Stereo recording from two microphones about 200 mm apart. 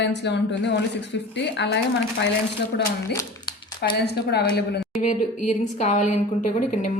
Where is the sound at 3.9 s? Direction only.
55° left (ahead or behind).